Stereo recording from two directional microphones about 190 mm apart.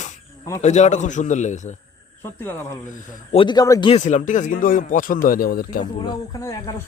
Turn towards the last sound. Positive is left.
turn(degrees=15)  # may be behind; listen again after turning